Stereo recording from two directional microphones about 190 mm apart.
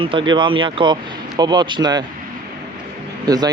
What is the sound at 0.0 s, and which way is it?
Speech, 25° right (ahead or behind).